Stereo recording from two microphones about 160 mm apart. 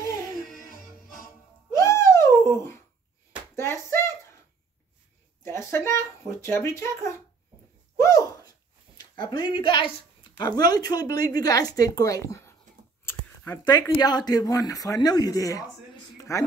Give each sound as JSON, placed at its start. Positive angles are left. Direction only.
{"t": 0.5, "sound": "music", "side_deg": 60}
{"t": 1.8, "sound": "a sound", "side_deg": 20}
{"t": 5.4, "sound": "speech", "side_deg": 15}
{"t": 8.9, "sound": "speech", "side_deg": 25}
{"t": 13.0, "sound": "a sound", "side_deg": 10}
{"t": 13.7, "sound": "speech", "side_deg": 25}